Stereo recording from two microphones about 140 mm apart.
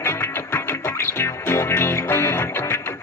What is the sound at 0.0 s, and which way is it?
Music, 15° left (ahead or behind).